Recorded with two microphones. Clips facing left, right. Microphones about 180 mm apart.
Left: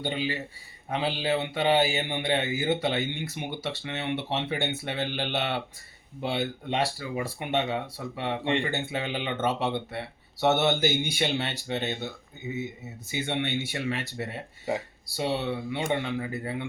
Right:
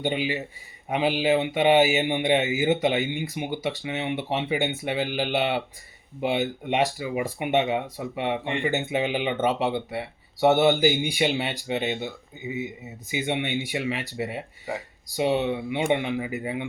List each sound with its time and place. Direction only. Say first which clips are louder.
0.0 s speech: right 4 dB; 15° right (ahead or behind)